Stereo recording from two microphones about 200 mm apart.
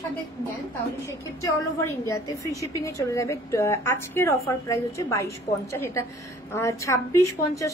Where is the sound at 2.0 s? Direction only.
15° left (ahead or behind).